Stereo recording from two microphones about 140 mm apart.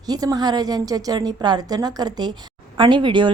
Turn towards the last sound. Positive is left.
turn(degrees=-35)  # may be behind; listen again after turning